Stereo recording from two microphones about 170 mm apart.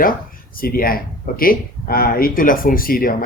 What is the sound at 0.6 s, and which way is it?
Speech, 60° left (ahead or behind).